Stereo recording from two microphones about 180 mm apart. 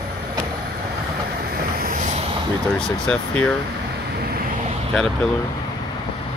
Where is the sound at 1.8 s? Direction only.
50° right (ahead or behind).